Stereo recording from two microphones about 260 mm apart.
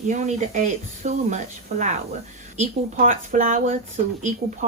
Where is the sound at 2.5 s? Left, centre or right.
Right.